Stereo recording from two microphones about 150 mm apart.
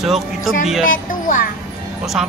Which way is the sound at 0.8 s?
65° left (ahead or behind).